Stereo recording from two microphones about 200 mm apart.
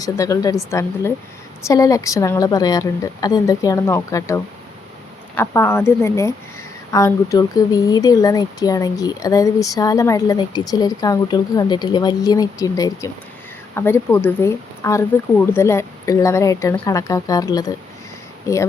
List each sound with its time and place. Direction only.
0.0 s a woman's voice: 15° left (ahead or behind)